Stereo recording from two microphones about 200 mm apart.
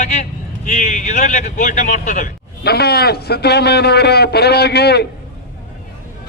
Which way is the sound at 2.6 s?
50° left (ahead or behind).